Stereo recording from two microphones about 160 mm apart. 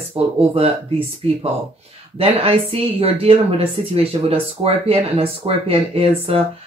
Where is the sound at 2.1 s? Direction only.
40° right (ahead or behind).